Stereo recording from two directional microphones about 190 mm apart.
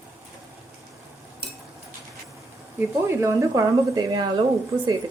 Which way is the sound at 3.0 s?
15° right (ahead or behind).